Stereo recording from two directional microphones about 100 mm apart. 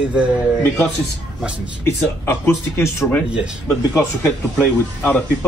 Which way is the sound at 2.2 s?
25° left (ahead or behind).